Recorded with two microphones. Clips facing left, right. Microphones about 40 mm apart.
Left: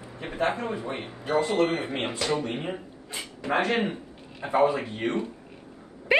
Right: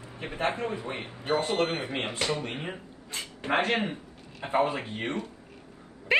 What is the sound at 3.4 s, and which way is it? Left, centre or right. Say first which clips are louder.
A man's voice: left 2 dB; right.